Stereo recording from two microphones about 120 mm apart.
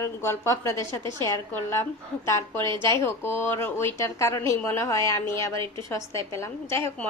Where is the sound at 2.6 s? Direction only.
40° right (ahead or behind).